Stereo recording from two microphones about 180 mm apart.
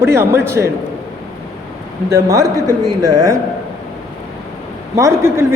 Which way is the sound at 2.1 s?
20° right (ahead or behind).